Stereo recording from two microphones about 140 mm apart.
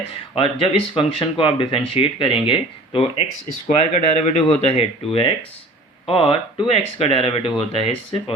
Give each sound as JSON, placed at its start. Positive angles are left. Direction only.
{"t": 0.3, "sound": "speech", "side_deg": 40}
{"t": 3.8, "sound": "speech", "side_deg": 55}